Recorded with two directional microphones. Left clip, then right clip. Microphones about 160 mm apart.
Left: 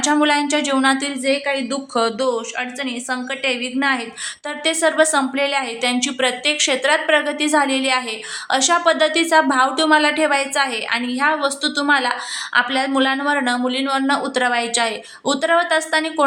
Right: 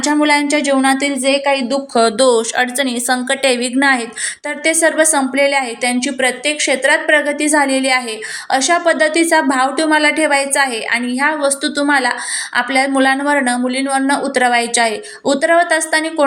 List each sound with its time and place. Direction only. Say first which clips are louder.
0.0 s a woman's voice: right 3 dB; centre (ahead or behind); by 4.0 s 25° right (ahead or behind)
4.6 s speech: right 3 dB; 10° right (ahead or behind)